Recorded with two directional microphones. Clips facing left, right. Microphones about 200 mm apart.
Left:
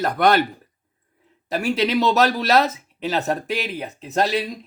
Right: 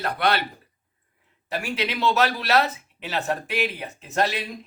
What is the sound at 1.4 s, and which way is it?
Speech, 40° left (ahead or behind).